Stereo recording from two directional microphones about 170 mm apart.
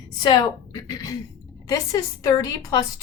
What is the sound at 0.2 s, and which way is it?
A woman's voice, 25° left (ahead or behind).